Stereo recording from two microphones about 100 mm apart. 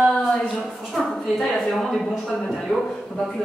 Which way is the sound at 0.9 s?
Centre (ahead or behind).